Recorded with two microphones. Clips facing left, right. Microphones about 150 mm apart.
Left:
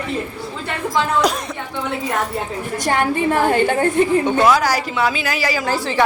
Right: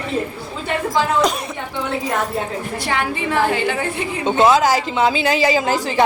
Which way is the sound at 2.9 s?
45° left (ahead or behind).